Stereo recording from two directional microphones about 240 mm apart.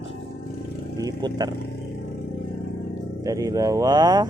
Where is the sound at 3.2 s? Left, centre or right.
Centre.